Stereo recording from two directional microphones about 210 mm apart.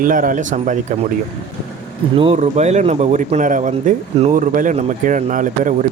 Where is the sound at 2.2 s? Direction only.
30° right (ahead or behind).